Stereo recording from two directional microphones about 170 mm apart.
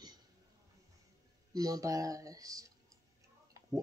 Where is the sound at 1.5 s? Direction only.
20° right (ahead or behind).